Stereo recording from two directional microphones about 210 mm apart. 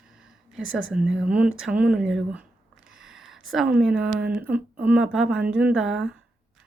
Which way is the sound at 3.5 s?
5° right (ahead or behind).